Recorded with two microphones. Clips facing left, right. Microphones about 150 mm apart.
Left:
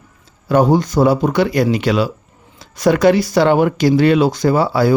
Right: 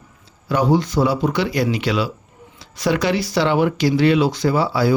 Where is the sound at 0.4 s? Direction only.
45° left (ahead or behind).